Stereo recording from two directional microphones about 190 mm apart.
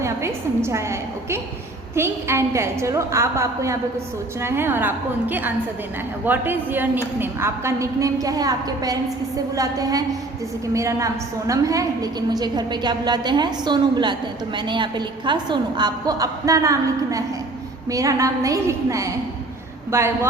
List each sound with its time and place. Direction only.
0.0 s a woman's voice: 15° right (ahead or behind)